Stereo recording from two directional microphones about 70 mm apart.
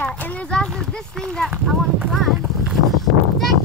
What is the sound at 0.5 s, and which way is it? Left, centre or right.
Speech, centre.